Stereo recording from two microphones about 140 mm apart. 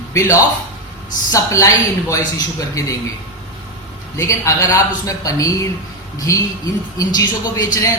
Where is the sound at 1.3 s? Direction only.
20° left (ahead or behind).